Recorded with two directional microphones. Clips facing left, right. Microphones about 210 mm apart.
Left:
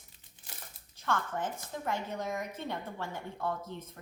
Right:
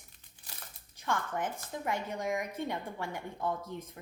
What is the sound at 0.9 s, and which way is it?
A woman's voice, 15° right (ahead or behind).